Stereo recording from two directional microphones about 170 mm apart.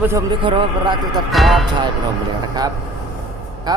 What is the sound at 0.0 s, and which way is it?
Speech, 15° right (ahead or behind).